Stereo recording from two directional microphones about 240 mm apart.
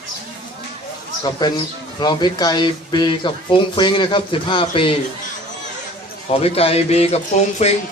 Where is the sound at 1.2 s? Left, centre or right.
Centre.